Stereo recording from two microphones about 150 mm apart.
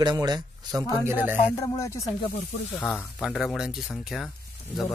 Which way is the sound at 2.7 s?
10° left (ahead or behind).